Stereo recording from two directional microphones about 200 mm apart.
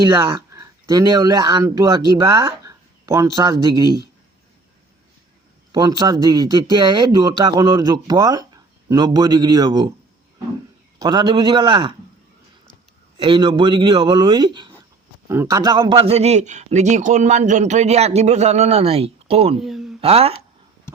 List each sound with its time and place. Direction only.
0.0 s speech: 20° right (ahead or behind)
5.7 s speech: 20° right (ahead or behind)
11.0 s speech: 20° right (ahead or behind)
13.1 s a man's voice: 25° right (ahead or behind)
19.5 s a sound: centre (ahead or behind)
20.0 s speech: 30° right (ahead or behind)